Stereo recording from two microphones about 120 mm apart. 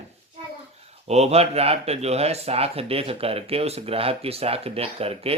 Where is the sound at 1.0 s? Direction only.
65° right (ahead or behind).